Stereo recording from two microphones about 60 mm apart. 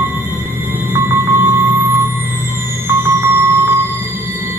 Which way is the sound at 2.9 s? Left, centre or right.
Right.